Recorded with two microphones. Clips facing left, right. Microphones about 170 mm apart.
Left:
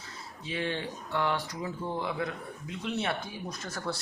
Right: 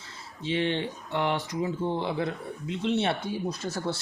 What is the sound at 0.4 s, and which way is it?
Speech, 25° right (ahead or behind).